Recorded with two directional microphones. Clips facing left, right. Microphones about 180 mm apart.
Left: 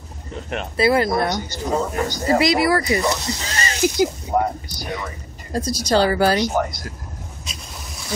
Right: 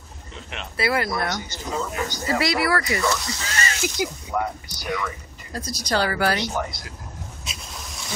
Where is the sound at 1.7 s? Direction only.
45° left (ahead or behind).